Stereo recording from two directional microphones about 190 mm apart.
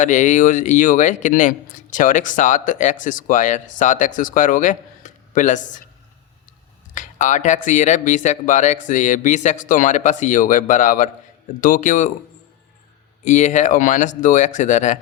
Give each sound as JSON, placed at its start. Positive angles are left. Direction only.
{"t": 0.0, "sound": "speech", "side_deg": 40}
{"t": 6.9, "sound": "speech", "side_deg": 40}
{"t": 13.2, "sound": "speech", "side_deg": 40}